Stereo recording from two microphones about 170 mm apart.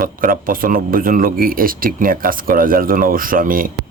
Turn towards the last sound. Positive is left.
turn(degrees=-55)  # may be behind; listen again after turning